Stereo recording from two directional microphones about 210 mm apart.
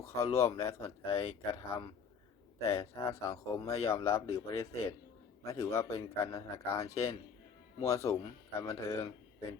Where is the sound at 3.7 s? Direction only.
30° left (ahead or behind).